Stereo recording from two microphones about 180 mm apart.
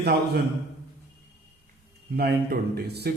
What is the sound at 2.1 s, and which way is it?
Speech, 60° right (ahead or behind).